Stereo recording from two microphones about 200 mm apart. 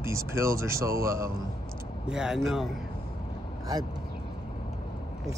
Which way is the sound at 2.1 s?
5° right (ahead or behind).